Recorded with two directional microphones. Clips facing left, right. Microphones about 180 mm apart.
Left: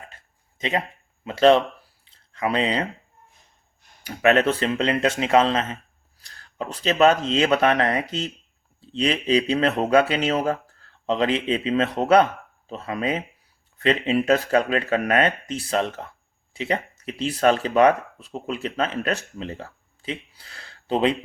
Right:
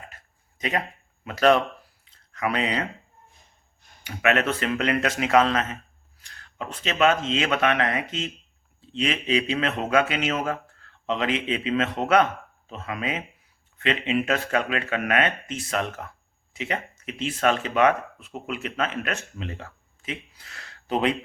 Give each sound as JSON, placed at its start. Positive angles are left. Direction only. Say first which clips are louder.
{"t": 1.2, "sound": "speech", "louder": "left 3 dB", "side_deg": 25}
{"t": 2.0, "sound": "a sound", "louder": "left 2 dB", "side_deg": 30}
{"t": 4.0, "sound": "speech", "louder": "left 5 dB", "side_deg": 35}